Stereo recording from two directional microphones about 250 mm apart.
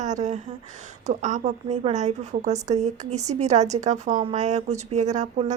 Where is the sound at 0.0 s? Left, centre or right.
Right.